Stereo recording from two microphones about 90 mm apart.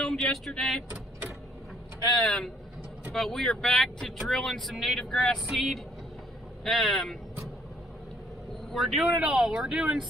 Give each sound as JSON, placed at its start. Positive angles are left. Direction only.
{"t": 0.0, "sound": "speech", "side_deg": 5}
{"t": 2.2, "sound": "speech", "side_deg": 5}
{"t": 8.7, "sound": "speech", "side_deg": 0}